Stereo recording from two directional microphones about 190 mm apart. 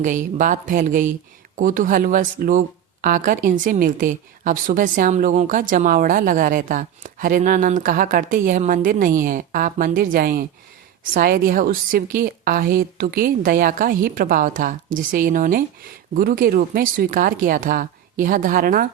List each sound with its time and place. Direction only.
0.0 s speech: 45° right (ahead or behind)